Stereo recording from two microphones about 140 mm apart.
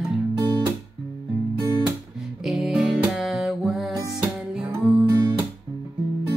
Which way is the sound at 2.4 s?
Centre (ahead or behind).